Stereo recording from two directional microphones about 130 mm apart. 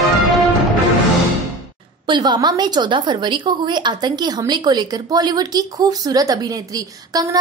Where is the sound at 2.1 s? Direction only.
35° right (ahead or behind).